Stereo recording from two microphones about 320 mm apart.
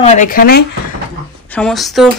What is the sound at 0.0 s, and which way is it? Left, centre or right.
Speech, left.